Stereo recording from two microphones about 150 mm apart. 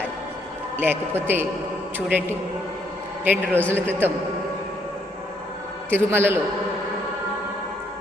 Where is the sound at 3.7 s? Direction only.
15° right (ahead or behind).